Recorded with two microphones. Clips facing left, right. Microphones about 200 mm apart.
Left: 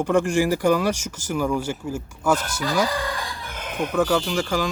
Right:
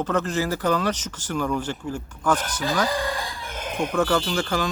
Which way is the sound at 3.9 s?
10° left (ahead or behind).